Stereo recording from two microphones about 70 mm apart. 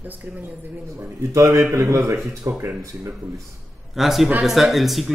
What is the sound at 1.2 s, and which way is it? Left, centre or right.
Speech, right.